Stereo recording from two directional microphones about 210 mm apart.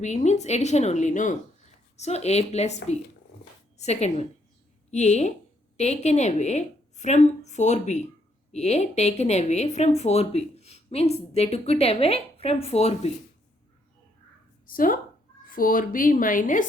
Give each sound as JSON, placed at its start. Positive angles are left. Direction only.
{"t": 0.0, "sound": "speech", "side_deg": 35}
{"t": 14.7, "sound": "speech", "side_deg": 40}